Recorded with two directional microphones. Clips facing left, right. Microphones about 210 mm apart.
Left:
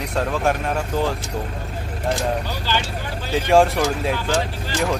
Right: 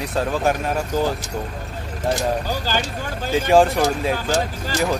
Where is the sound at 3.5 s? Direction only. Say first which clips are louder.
Even; centre (ahead or behind).